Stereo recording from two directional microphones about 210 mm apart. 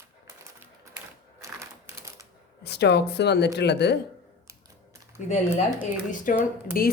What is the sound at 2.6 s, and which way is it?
Speech, 55° left (ahead or behind).